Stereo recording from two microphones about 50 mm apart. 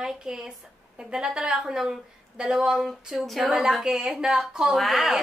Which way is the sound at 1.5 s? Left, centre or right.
Centre.